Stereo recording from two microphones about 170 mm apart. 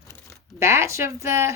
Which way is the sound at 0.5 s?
15° right (ahead or behind).